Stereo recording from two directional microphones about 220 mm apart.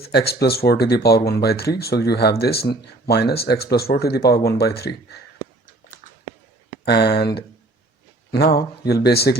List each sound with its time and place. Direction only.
0.1 s speech: 45° left (ahead or behind)
6.8 s speech: 45° left (ahead or behind)
8.3 s speech: 45° left (ahead or behind)